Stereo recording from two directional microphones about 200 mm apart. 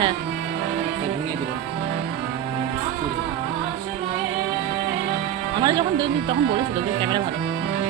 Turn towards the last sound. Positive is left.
turn(degrees=-25)  # may be behind; listen again after turning